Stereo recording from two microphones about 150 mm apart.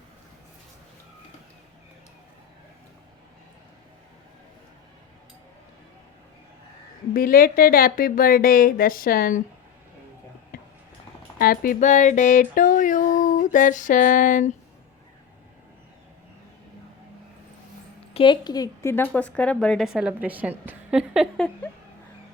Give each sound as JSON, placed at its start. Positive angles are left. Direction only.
{"t": 7.1, "sound": "a woman's voice", "side_deg": 70}
{"t": 11.3, "sound": "music", "side_deg": 75}
{"t": 18.1, "sound": "speech", "side_deg": 35}